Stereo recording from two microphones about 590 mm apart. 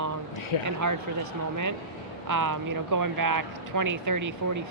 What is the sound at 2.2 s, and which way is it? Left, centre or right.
Speech, right.